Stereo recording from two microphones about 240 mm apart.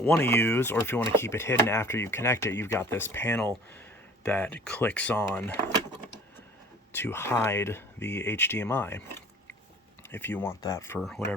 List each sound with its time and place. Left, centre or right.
0.0 s speech: centre
6.9 s speech: centre
8.0 s speech: left
8.3 s speech: centre